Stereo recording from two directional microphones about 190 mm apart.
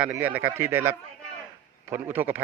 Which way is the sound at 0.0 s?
10° right (ahead or behind).